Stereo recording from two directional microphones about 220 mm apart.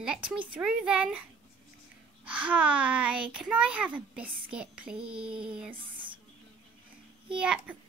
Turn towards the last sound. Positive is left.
turn(degrees=-5)  # may be behind; listen again after turning